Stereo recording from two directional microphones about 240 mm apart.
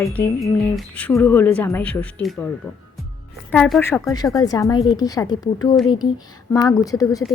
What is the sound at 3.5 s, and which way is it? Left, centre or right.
Speech, centre.